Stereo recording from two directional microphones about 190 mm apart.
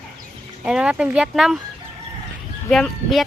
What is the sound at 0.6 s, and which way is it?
Speech, 5° right (ahead or behind).